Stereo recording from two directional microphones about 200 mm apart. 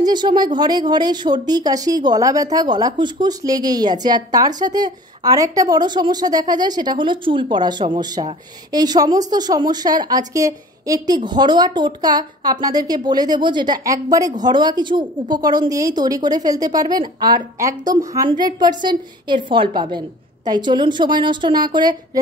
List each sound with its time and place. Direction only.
0.0 s speech: 20° right (ahead or behind)